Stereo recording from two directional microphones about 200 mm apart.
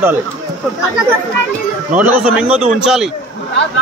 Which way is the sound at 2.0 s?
5° right (ahead or behind).